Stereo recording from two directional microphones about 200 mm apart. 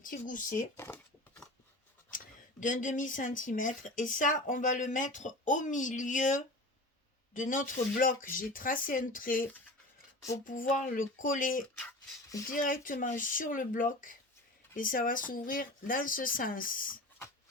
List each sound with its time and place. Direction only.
0.0 s speech: 40° left (ahead or behind)
0.8 s a sound: 10° left (ahead or behind)
2.0 s speech: 40° left (ahead or behind)